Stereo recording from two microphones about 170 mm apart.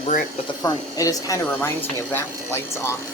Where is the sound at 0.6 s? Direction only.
20° left (ahead or behind).